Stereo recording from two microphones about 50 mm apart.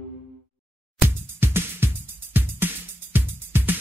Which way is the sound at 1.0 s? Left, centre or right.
Right.